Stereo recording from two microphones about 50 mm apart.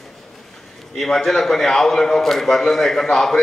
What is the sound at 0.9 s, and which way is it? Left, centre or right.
A man's voice, centre.